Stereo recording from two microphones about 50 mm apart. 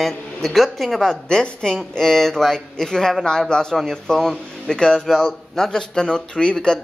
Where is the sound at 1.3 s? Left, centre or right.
Centre.